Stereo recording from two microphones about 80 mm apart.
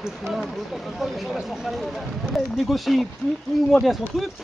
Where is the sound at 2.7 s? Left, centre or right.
Centre.